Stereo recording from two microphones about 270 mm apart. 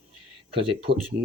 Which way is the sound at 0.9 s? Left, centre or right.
Centre.